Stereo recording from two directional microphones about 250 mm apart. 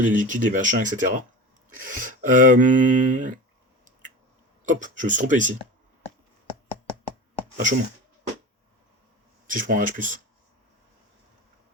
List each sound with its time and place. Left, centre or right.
0.0 s speech: right
4.6 s speech: right
7.5 s speech: right
9.5 s speech: right